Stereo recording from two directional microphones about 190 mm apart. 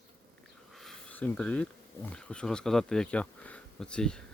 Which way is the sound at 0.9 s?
5° left (ahead or behind).